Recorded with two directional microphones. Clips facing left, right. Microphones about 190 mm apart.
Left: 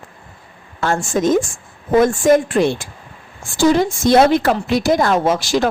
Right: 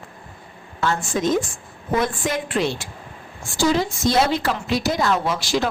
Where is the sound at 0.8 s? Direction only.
45° left (ahead or behind).